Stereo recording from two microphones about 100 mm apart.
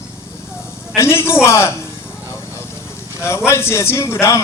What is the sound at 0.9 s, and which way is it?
Speech, 25° left (ahead or behind).